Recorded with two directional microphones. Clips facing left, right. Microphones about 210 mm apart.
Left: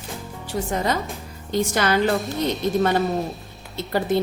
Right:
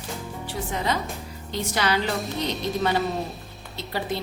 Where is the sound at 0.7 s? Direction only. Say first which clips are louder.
Left 2 dB; 45° left (ahead or behind).